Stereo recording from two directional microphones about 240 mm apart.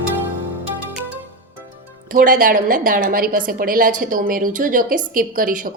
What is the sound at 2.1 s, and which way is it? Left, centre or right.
A woman's voice, right.